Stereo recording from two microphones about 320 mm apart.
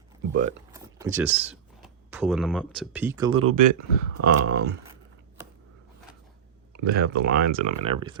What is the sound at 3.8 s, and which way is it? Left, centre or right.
Speech, right.